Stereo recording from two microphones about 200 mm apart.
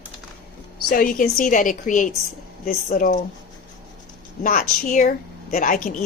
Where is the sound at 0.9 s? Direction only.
40° left (ahead or behind).